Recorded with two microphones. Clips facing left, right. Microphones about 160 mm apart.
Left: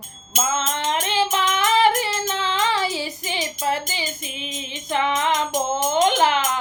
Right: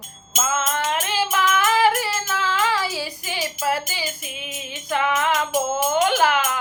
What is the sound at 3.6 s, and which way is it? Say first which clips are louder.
Music: right 1 dB; 20° left (ahead or behind).